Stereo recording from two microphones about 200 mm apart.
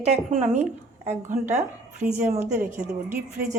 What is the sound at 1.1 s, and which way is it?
A woman's voice, 35° right (ahead or behind).